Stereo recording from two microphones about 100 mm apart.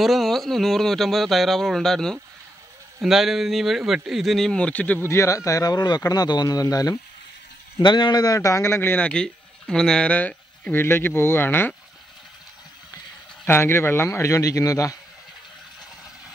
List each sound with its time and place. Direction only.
0.0 s speech: centre (ahead or behind)
5.0 s speech: 30° left (ahead or behind)
7.8 s speech: 50° left (ahead or behind); by 11.7 s 20° left (ahead or behind)
13.5 s speech: 25° left (ahead or behind)